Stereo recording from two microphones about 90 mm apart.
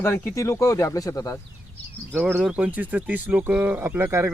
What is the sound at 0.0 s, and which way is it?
Speech, 25° left (ahead or behind).